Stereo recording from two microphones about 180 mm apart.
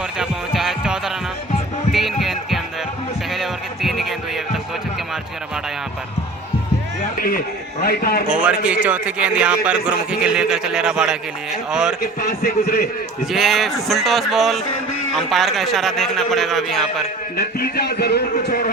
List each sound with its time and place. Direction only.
0.2 s music: 5° right (ahead or behind)
3.3 s heart sounds: centre (ahead or behind)
7.2 s speech: 55° left (ahead or behind)
8.3 s speech: 5° right (ahead or behind)
12.3 s speech: 55° left (ahead or behind)
13.3 s speech: centre (ahead or behind)
17.3 s speech: 60° left (ahead or behind)